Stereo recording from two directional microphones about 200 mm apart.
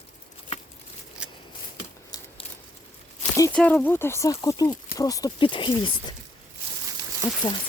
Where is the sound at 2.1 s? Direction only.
20° left (ahead or behind).